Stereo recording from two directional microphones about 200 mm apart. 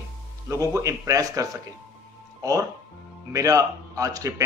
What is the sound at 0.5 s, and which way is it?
Speech, 15° right (ahead or behind).